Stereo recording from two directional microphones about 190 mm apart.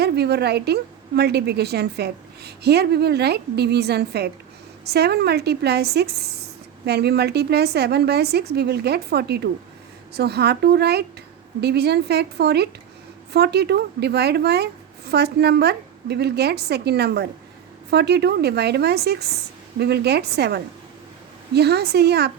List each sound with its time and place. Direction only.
0.0 s a woman's voice: 60° right (ahead or behind)